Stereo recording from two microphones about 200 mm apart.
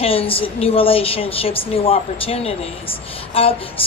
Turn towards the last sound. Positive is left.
turn(degrees=30)  # may be behind; listen again after turning